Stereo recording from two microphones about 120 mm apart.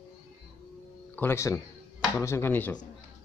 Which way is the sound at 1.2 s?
20° left (ahead or behind).